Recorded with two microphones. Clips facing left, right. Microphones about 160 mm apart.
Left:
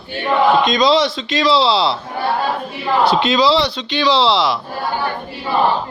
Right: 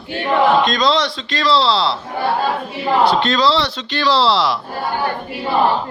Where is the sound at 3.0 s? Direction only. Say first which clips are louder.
Left 2 dB; centre (ahead or behind).